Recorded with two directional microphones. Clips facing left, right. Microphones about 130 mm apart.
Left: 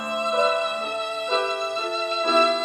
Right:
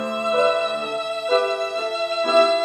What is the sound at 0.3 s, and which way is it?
Music, centre (ahead or behind).